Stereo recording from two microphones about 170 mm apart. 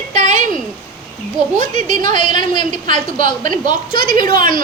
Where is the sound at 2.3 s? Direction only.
25° left (ahead or behind).